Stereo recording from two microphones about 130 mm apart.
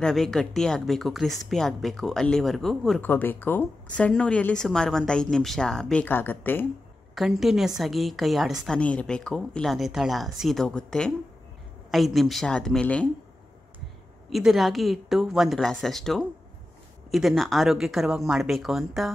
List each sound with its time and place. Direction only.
0.0 s a woman's voice: 5° left (ahead or behind)
3.0 s a woman's voice: 15° left (ahead or behind)
7.2 s a woman's voice: centre (ahead or behind)
14.3 s a woman's voice: centre (ahead or behind)